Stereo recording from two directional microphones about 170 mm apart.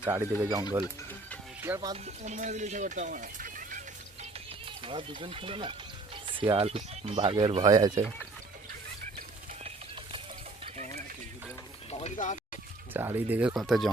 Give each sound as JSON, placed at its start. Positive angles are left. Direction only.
{"t": 0.0, "sound": "speech", "side_deg": -15}
{"t": 1.6, "sound": "speech", "side_deg": -15}
{"t": 2.2, "sound": "speech", "side_deg": -45}
{"t": 4.2, "sound": "music", "side_deg": -30}
{"t": 6.2, "sound": "speech", "side_deg": -30}
{"t": 7.6, "sound": "speech", "side_deg": -20}
{"t": 9.6, "sound": "a sound", "side_deg": -30}
{"t": 11.9, "sound": "speech", "side_deg": 40}
{"t": 12.9, "sound": "speech", "side_deg": -10}